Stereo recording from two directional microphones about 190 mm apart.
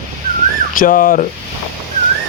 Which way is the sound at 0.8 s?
45° left (ahead or behind).